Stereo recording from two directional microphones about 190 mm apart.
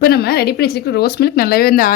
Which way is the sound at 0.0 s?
55° left (ahead or behind).